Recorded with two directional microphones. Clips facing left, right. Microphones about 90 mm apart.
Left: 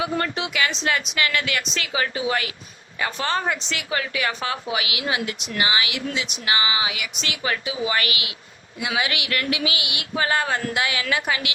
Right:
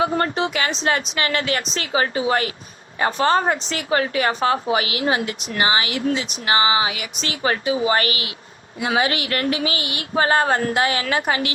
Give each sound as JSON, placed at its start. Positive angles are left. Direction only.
{"t": 0.0, "sound": "a woman's voice", "side_deg": -35}